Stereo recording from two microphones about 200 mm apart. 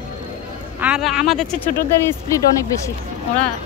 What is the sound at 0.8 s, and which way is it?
Speech, 5° right (ahead or behind).